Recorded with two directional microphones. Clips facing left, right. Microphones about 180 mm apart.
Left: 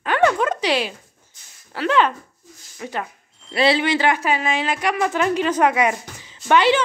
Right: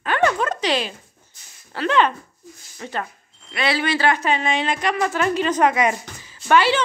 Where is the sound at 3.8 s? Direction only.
20° left (ahead or behind).